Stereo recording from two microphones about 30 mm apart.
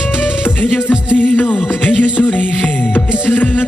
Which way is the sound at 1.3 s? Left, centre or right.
Left.